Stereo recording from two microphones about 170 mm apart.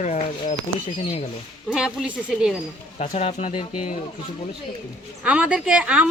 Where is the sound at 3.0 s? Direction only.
40° left (ahead or behind).